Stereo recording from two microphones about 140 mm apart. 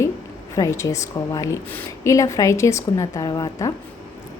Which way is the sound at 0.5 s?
25° left (ahead or behind).